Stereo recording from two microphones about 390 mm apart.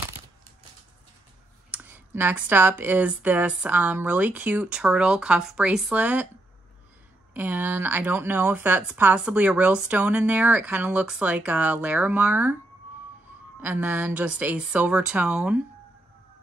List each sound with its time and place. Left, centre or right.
1.7 s speech: centre
7.3 s speech: centre
13.6 s speech: centre